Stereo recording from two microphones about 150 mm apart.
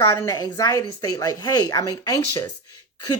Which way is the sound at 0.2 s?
25° left (ahead or behind).